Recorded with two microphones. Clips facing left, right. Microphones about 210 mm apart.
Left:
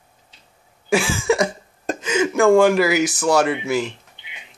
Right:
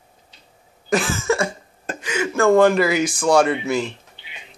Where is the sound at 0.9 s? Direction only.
10° left (ahead or behind).